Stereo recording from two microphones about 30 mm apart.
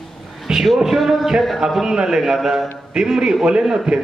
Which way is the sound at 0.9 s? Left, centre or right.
Centre.